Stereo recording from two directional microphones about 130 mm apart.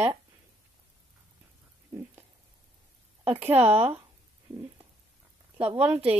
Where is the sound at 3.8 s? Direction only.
50° right (ahead or behind).